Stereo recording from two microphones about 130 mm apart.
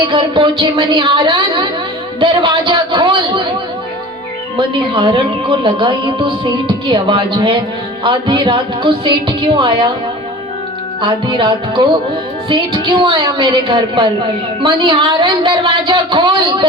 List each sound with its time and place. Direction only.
0.1 s a woman's voice: 40° right (ahead or behind)
4.5 s a woman's voice: 40° right (ahead or behind)
11.0 s a woman's voice: 35° right (ahead or behind)
13.0 s a woman's voice: 40° right (ahead or behind)